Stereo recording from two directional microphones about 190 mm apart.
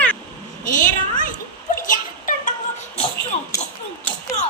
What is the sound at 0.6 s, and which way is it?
Speech, 45° left (ahead or behind).